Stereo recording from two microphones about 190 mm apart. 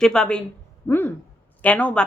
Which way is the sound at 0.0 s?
5° left (ahead or behind).